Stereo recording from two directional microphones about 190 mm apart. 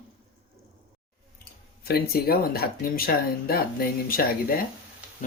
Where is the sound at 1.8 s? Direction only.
55° left (ahead or behind).